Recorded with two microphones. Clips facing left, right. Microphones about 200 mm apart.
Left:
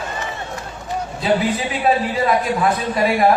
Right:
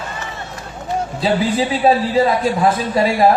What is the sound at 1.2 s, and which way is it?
A man's voice, 30° right (ahead or behind).